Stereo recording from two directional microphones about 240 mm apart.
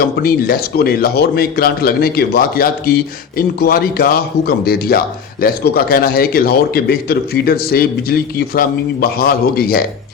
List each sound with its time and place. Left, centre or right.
0.0 s speech: left